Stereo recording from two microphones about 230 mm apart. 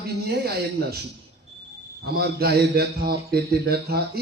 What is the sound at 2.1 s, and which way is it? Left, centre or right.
Speech, right.